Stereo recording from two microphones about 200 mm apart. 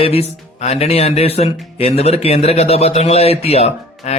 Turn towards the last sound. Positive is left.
turn(degrees=30)  # may be behind; listen again after turning